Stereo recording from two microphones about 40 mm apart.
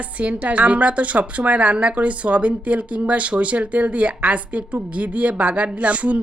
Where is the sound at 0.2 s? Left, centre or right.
Right.